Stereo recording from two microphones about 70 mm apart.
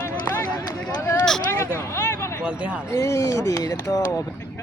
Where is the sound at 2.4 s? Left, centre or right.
Centre.